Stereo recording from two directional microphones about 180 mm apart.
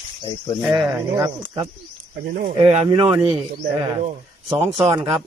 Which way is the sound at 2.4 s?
35° right (ahead or behind).